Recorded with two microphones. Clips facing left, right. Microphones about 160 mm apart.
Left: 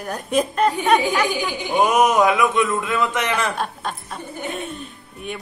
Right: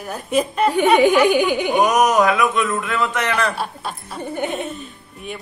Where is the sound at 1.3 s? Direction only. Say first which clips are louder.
Right 8 dB; 60° right (ahead or behind).